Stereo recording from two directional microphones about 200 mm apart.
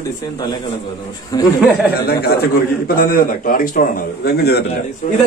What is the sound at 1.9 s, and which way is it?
A man's voice, 50° left (ahead or behind).